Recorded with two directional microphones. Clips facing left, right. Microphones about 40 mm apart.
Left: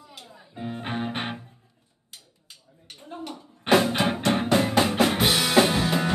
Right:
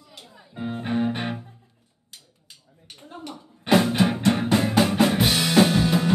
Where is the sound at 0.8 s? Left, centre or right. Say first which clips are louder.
Right 5 dB; left.